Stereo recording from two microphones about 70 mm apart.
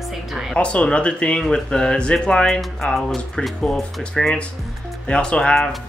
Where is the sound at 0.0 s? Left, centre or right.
Centre.